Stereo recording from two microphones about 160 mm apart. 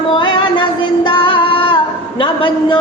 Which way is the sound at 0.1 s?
30° left (ahead or behind).